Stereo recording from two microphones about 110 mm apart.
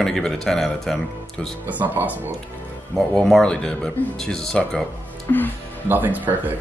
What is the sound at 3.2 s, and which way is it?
Speech, 5° left (ahead or behind).